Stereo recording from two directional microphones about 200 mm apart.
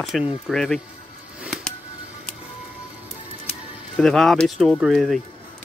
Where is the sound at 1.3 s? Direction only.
Centre (ahead or behind).